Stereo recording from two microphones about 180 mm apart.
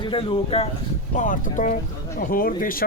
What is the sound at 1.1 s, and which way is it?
Speech, 45° left (ahead or behind).